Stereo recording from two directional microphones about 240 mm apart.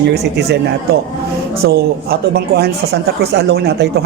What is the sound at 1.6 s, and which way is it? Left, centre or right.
A woman's voice, right.